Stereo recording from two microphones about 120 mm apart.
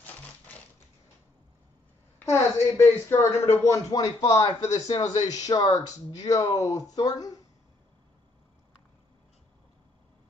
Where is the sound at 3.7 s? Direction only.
30° left (ahead or behind).